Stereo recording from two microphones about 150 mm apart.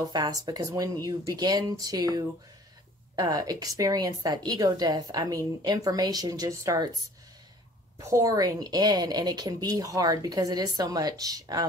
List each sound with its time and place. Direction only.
0.0 s a woman's voice: 25° right (ahead or behind)
8.0 s a woman's voice: 20° right (ahead or behind)